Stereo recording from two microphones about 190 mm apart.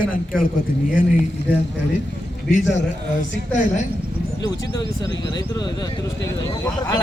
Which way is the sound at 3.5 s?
40° left (ahead or behind).